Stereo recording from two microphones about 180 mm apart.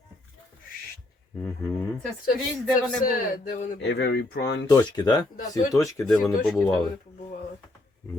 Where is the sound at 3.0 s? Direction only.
50° left (ahead or behind).